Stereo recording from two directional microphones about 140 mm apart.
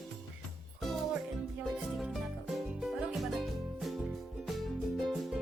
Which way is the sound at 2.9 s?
Centre (ahead or behind).